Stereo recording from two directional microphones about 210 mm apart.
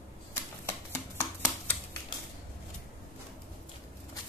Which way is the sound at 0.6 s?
15° left (ahead or behind).